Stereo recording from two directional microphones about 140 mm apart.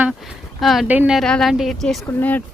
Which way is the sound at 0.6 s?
Centre (ahead or behind).